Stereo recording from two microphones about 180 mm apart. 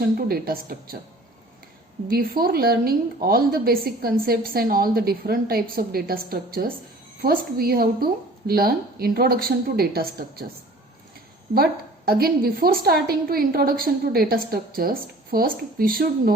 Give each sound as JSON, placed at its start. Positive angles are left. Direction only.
{"t": 0.0, "sound": "a woman's voice", "side_deg": -55}
{"t": 2.0, "sound": "a woman's voice", "side_deg": -55}
{"t": 11.5, "sound": "a woman's voice", "side_deg": -60}